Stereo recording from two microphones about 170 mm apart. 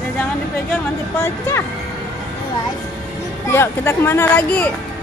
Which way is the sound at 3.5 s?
15° left (ahead or behind).